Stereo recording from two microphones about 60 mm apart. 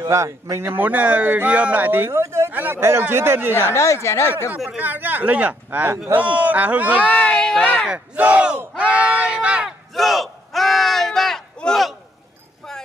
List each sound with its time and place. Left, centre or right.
0.1 s speech: right
0.7 s speech: right
2.2 s speech: right
2.5 s speech: right
3.7 s speech: left
4.7 s speech: right
7.0 s speech: centre
7.9 s speech: right
9.9 s battle cry: centre